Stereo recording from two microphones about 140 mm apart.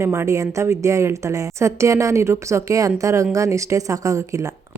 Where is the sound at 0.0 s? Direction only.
20° right (ahead or behind).